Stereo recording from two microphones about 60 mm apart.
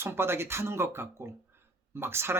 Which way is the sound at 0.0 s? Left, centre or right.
Right.